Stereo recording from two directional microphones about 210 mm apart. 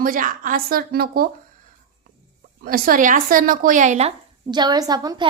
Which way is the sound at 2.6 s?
45° right (ahead or behind).